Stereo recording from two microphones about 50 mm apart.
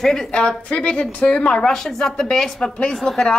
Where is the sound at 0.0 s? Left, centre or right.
Centre.